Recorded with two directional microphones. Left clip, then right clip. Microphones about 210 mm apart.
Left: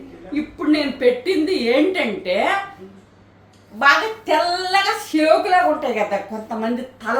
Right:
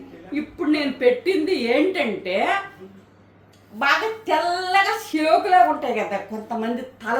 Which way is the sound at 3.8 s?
Centre (ahead or behind).